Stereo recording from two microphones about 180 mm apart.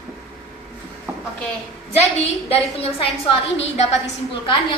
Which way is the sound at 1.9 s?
35° left (ahead or behind).